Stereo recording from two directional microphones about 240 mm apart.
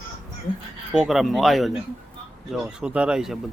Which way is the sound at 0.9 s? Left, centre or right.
Centre.